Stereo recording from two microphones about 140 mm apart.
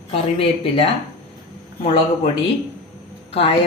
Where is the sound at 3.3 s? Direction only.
45° left (ahead or behind).